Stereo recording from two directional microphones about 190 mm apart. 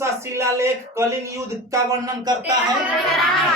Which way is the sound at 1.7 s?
20° right (ahead or behind).